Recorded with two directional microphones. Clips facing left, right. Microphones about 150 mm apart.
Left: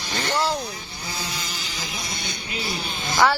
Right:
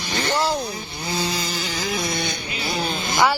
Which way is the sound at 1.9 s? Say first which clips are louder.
Right 9 dB; 60° right (ahead or behind).